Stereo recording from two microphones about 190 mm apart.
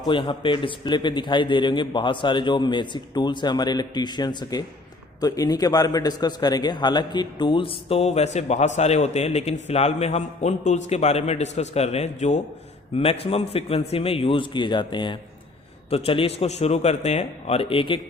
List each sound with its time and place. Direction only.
0.0 s a man's voice: 25° left (ahead or behind)